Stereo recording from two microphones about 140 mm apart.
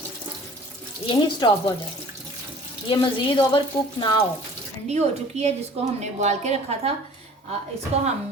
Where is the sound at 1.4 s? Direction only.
30° left (ahead or behind).